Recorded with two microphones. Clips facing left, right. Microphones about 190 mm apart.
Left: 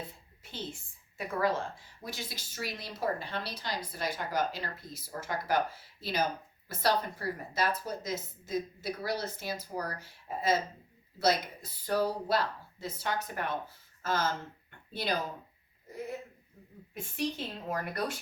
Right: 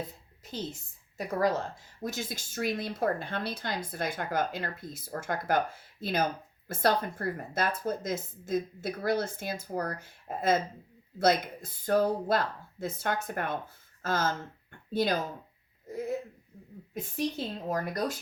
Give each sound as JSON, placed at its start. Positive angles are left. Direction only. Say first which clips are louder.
{"t": 0.0, "sound": "a sound", "louder": "right 5 dB", "side_deg": -40}
{"t": 1.2, "sound": "a woman's voice", "louder": "right 3 dB", "side_deg": -40}
{"t": 16.9, "sound": "a woman's voice", "louder": "right 2 dB", "side_deg": -40}